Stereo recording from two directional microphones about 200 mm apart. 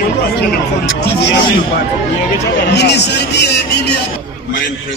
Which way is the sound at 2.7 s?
55° left (ahead or behind).